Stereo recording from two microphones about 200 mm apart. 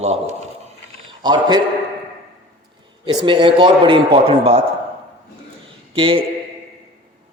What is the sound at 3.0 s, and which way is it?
A man's voice, 25° right (ahead or behind).